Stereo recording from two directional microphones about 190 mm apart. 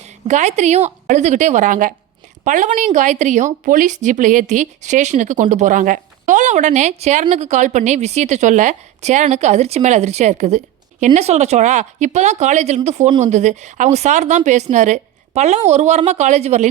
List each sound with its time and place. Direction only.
0.3 s speech: 40° right (ahead or behind)